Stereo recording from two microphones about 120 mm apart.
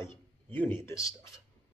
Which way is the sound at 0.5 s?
15° left (ahead or behind).